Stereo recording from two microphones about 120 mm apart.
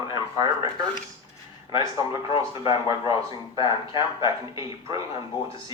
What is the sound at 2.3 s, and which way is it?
Speech, 50° left (ahead or behind).